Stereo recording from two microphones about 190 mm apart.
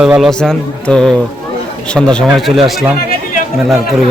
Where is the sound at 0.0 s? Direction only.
Centre (ahead or behind).